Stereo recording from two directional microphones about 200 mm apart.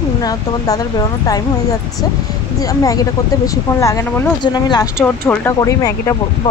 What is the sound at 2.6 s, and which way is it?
Speech, 15° left (ahead or behind).